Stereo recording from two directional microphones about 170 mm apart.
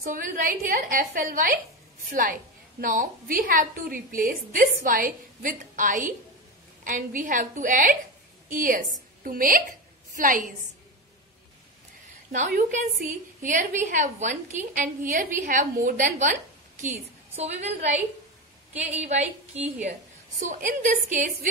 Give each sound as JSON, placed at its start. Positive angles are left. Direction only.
{"t": 0.0, "sound": "a woman's voice", "side_deg": -55}
{"t": 8.5, "sound": "a sound", "side_deg": -55}
{"t": 12.3, "sound": "a woman's voice", "side_deg": -50}
{"t": 17.4, "sound": "a woman's voice", "side_deg": -40}